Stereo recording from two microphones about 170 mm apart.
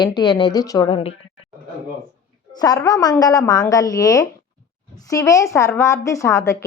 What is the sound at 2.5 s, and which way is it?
A woman's voice, 20° left (ahead or behind).